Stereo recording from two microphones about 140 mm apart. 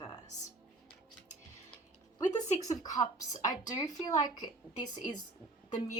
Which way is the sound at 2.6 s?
25° left (ahead or behind).